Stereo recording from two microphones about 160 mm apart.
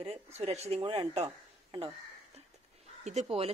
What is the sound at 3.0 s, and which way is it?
Speech, 45° right (ahead or behind).